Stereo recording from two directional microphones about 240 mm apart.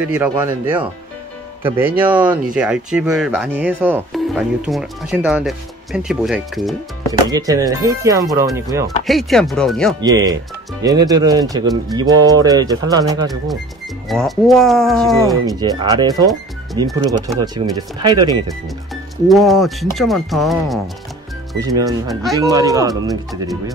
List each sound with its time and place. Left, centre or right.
0.1 s speech: centre
7.1 s speech: centre
8.8 s speech: centre
9.9 s speech: centre
14.0 s speech: centre
15.6 s speech: centre
19.2 s speech: centre
21.6 s speech: centre